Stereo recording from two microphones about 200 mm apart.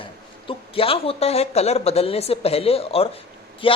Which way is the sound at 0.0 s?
25° left (ahead or behind).